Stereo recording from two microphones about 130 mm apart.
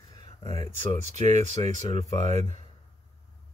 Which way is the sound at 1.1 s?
65° right (ahead or behind).